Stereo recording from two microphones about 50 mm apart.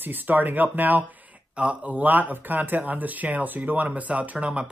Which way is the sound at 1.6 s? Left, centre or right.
Right.